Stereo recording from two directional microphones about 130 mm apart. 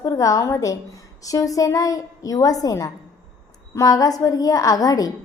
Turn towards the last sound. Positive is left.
turn(degrees=30)  # may be behind; listen again after turning